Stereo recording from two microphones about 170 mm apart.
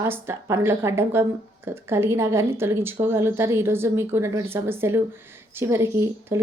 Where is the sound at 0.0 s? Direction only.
15° right (ahead or behind).